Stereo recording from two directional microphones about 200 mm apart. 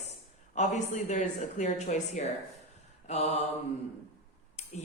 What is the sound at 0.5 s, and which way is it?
Mantra, 35° left (ahead or behind).